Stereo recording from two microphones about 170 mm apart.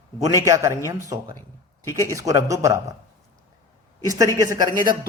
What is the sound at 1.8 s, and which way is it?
Speech, 15° left (ahead or behind).